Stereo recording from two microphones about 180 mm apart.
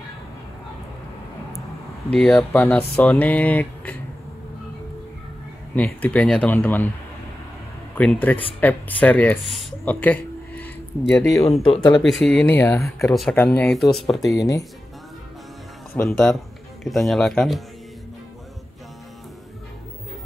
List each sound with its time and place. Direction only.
2.0 s speech: 5° left (ahead or behind)
5.8 s speech: 10° left (ahead or behind)
7.9 s speech: 10° left (ahead or behind)
9.9 s a sound: 10° left (ahead or behind)
11.7 s speech: 25° left (ahead or behind)
12.0 s speech: centre (ahead or behind)
12.4 s speech: 15° left (ahead or behind)
13.1 s speech: centre (ahead or behind)
14.3 s speech: 20° left (ahead or behind)
15.9 s speech: 5° left (ahead or behind)